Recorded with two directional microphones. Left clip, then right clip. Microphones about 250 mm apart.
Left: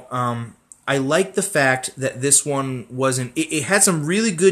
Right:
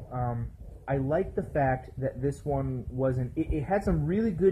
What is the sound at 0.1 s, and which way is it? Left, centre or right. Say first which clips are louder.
Speech: left 11 dB; left.